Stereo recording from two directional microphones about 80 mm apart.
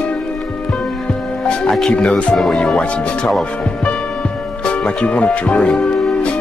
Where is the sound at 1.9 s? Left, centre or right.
Centre.